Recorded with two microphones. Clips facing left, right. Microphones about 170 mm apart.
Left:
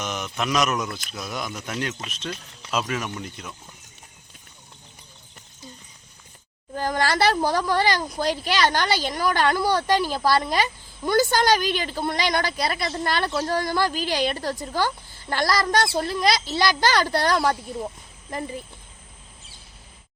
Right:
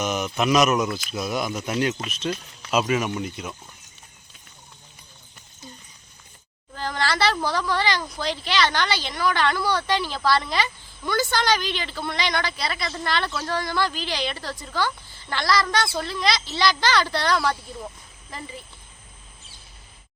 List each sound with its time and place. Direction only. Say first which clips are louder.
0.0 s speech: right 5 dB; 10° right (ahead or behind)
6.7 s a sound: left 3 dB; 45° left (ahead or behind)
7.4 s speech: left 3 dB; 45° left (ahead or behind)